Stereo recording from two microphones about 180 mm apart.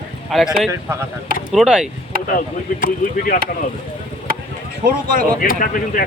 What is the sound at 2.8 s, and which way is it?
Speech, 50° left (ahead or behind).